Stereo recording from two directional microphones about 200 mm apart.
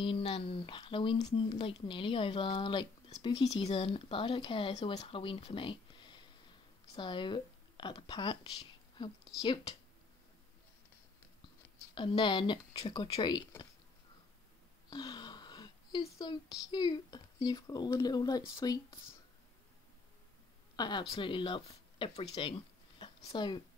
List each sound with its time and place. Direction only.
0.0 s speech: 25° left (ahead or behind)
11.9 s speech: 25° left (ahead or behind)
14.9 s a sound: 20° left (ahead or behind)
16.7 s speech: 20° left (ahead or behind)
20.7 s speech: 20° left (ahead or behind)